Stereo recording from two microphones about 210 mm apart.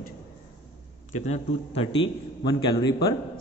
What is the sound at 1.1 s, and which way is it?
A man's voice, 30° left (ahead or behind).